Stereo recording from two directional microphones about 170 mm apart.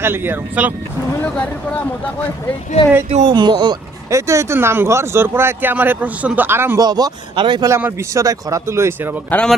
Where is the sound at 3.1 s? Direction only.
40° right (ahead or behind).